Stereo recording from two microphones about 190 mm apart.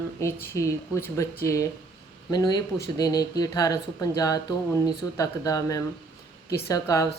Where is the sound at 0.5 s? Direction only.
15° left (ahead or behind).